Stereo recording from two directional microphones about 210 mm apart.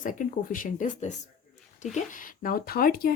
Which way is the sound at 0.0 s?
40° left (ahead or behind).